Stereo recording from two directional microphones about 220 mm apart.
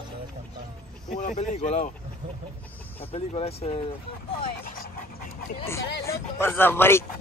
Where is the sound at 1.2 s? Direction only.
35° left (ahead or behind).